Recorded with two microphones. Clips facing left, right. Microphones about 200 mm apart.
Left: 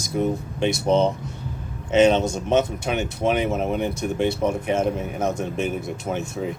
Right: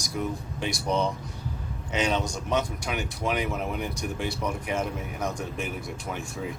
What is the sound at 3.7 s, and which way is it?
Speech, 25° left (ahead or behind).